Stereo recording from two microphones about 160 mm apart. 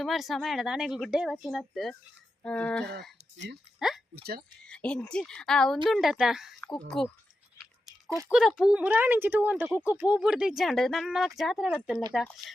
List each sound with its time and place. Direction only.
0.0 s speech: centre (ahead or behind)
3.8 s a sound: centre (ahead or behind)
4.1 s speech: 85° right
4.6 s speech: 5° left (ahead or behind)
8.3 s speech: 5° right (ahead or behind)